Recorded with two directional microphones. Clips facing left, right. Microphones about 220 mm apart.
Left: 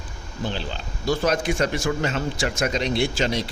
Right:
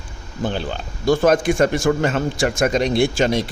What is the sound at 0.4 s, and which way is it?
Speech, 50° right (ahead or behind).